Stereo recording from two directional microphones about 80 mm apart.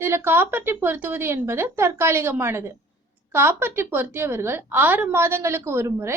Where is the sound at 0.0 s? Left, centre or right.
Right.